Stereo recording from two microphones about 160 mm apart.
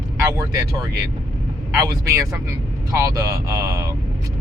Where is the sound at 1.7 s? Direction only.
20° right (ahead or behind).